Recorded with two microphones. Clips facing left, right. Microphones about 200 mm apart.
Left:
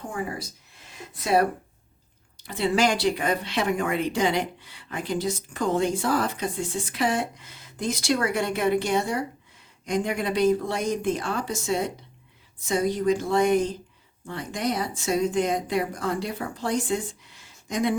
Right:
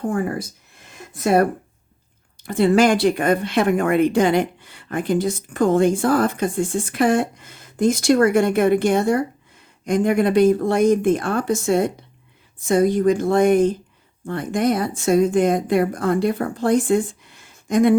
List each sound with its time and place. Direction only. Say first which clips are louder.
0.0 s speech: right 9 dB; 55° right (ahead or behind)